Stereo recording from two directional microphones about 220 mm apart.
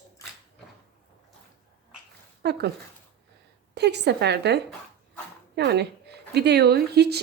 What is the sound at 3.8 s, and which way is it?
A woman's voice, 50° right (ahead or behind).